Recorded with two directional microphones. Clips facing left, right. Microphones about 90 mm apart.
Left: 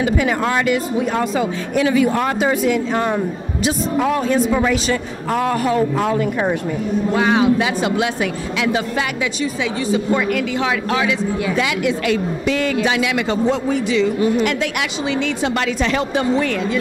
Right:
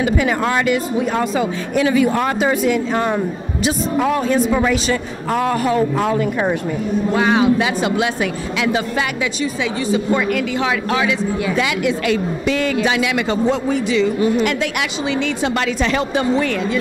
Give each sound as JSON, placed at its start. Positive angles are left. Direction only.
{"t": 0.0, "sound": "speech", "side_deg": -25}